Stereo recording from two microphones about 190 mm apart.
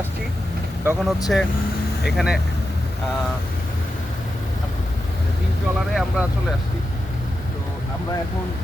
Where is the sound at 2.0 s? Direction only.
Centre (ahead or behind).